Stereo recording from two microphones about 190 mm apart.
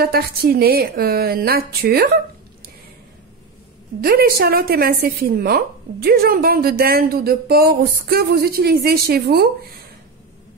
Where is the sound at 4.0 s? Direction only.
55° right (ahead or behind).